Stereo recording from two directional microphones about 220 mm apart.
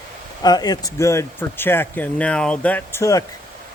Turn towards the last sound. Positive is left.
turn(degrees=15)  # may be behind; listen again after turning